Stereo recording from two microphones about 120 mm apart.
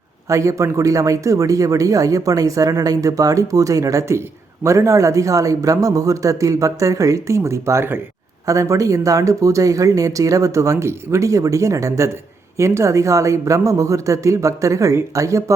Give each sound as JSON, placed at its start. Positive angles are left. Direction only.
{"t": 0.3, "sound": "speech", "side_deg": -25}